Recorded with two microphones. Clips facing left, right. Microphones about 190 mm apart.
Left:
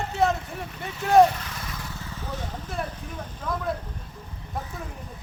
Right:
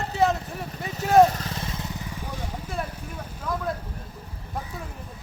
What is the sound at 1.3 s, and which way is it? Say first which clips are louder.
Vehicle: right 3 dB; 35° right (ahead or behind).